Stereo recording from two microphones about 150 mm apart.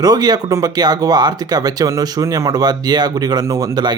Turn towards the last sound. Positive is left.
turn(degrees=-25)  # may be behind; listen again after turning